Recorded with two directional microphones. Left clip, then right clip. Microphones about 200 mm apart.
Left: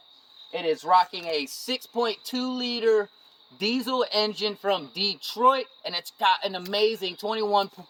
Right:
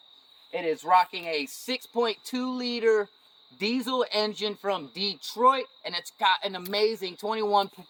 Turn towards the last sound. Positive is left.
turn(degrees=0)  # may be behind; listen again after turning